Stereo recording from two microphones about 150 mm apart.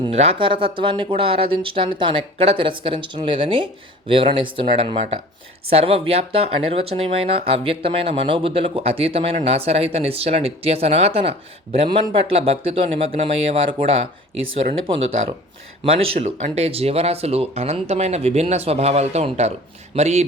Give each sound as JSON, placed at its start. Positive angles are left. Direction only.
{"t": 0.1, "sound": "speech", "side_deg": -40}
{"t": 15.8, "sound": "speech", "side_deg": -45}